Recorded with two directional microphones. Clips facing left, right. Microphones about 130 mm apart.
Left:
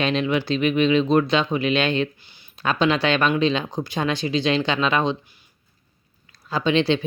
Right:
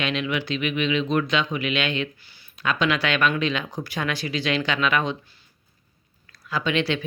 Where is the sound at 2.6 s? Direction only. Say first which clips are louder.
Left 3 dB; 30° left (ahead or behind).